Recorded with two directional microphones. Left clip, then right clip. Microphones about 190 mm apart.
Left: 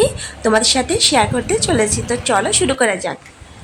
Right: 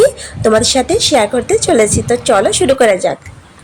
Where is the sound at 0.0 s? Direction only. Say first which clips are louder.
Right 6 dB; 10° right (ahead or behind).